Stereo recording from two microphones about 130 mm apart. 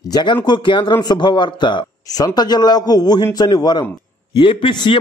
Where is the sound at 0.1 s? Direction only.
35° left (ahead or behind).